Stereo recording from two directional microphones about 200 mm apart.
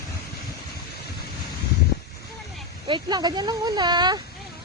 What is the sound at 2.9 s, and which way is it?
Speech, 20° right (ahead or behind).